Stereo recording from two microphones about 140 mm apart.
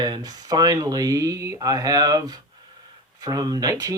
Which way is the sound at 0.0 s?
30° right (ahead or behind).